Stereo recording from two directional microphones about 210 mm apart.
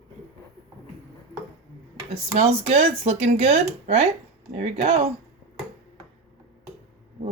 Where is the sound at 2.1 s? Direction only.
30° right (ahead or behind).